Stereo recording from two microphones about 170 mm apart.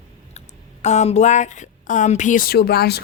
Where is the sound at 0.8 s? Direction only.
40° left (ahead or behind).